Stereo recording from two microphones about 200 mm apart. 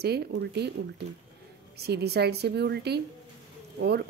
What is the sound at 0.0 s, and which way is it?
Speech, 55° right (ahead or behind).